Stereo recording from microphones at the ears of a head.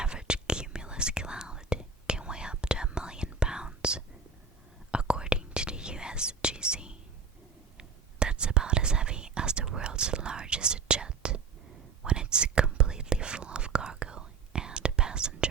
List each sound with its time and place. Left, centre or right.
0.0 s whispering: centre
4.9 s whispering: centre
8.2 s whispering: right